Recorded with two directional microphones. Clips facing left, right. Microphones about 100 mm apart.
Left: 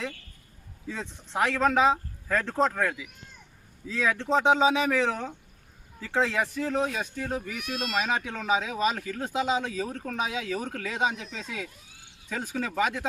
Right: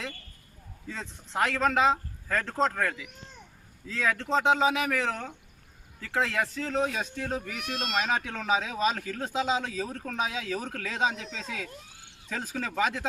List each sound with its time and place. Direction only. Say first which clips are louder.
0.9 s speech: left 3 dB; 15° left (ahead or behind)
6.8 s speech: even; centre (ahead or behind)